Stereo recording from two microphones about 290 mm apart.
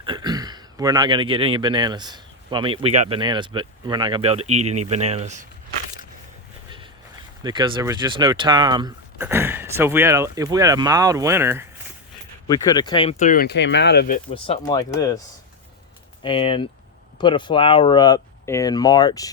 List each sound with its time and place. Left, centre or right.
0.0 s speech: centre
7.4 s speech: centre
12.5 s speech: centre; by 14.2 s left
14.3 s speech: centre
16.2 s speech: centre